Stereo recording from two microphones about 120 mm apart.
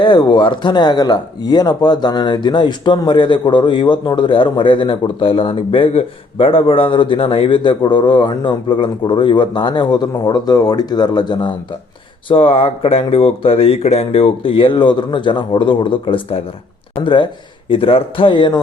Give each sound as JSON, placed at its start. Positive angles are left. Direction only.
{"t": 0.0, "sound": "speech", "side_deg": 40}
{"t": 12.3, "sound": "speech", "side_deg": 50}